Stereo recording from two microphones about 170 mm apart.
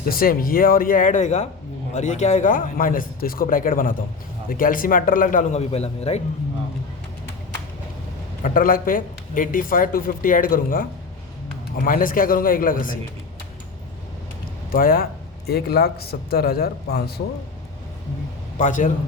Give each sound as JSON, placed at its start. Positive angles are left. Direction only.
{"t": 0.1, "sound": "a man's voice", "side_deg": 60}
{"t": 8.4, "sound": "speech", "side_deg": 50}
{"t": 11.9, "sound": "speech", "side_deg": 55}
{"t": 14.7, "sound": "a man's voice", "side_deg": 60}
{"t": 18.6, "sound": "a man's voice", "side_deg": 50}